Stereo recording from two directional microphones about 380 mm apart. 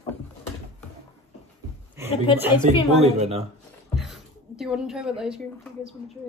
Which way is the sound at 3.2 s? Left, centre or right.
Centre.